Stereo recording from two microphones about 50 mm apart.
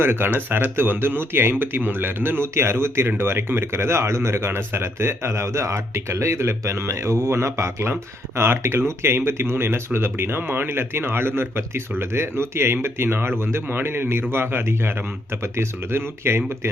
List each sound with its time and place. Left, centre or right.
0.0 s a man's voice: right